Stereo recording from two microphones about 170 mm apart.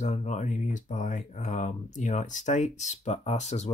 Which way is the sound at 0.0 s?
45° left (ahead or behind).